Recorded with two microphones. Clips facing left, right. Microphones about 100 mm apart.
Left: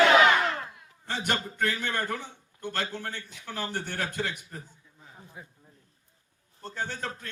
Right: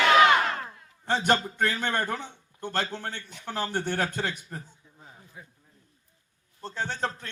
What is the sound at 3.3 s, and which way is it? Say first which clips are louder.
Speech: right 5 dB; 50° right (ahead or behind).